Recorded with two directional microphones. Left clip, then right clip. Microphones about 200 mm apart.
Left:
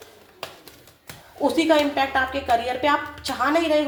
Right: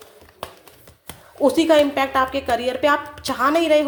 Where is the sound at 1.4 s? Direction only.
35° right (ahead or behind).